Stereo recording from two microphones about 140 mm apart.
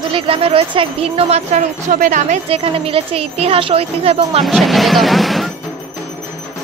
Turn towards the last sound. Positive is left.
turn(degrees=0)  # may be behind; listen again after turning